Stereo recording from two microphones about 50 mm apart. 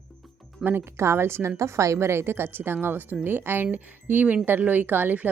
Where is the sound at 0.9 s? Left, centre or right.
Right.